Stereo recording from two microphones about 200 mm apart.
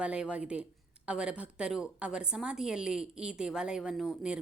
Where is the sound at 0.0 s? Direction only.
5° right (ahead or behind).